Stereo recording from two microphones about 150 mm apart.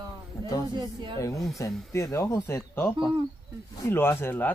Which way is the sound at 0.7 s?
30° right (ahead or behind).